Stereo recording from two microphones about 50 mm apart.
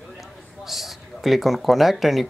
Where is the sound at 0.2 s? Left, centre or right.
Centre.